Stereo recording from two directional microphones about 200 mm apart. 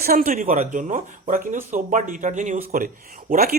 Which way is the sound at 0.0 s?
50° right (ahead or behind).